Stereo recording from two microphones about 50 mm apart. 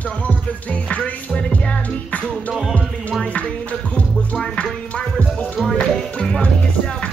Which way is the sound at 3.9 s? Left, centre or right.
Centre.